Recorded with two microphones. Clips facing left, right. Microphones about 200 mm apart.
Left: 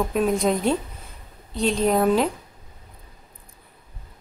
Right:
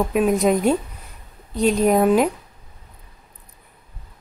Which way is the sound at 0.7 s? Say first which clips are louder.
Right 3 dB; 10° right (ahead or behind).